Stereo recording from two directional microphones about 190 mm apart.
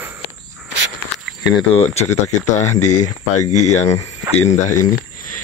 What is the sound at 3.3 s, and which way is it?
Speech, 40° left (ahead or behind).